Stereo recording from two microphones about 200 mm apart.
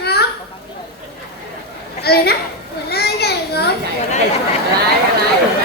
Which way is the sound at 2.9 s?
55° left (ahead or behind).